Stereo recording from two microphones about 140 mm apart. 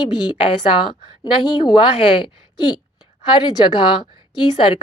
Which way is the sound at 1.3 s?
30° left (ahead or behind).